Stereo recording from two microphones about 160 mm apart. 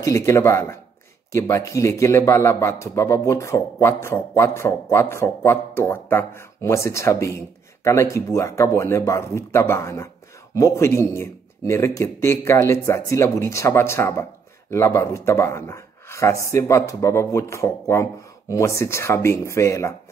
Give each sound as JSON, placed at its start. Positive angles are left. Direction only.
{"t": 0.0, "sound": "a man's voice", "side_deg": 20}